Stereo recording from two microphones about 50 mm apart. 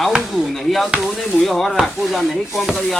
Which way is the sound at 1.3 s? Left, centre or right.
Centre.